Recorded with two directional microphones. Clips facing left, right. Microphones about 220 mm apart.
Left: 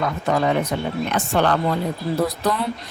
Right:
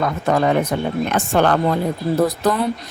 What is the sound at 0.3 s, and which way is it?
A woman's voice, 50° right (ahead or behind).